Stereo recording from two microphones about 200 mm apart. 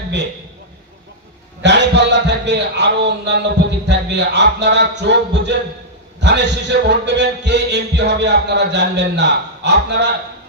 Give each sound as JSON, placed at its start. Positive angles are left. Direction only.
{"t": 1.6, "sound": "a man's voice", "side_deg": -60}